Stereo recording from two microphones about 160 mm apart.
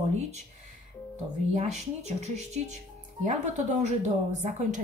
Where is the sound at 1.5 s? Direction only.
45° right (ahead or behind).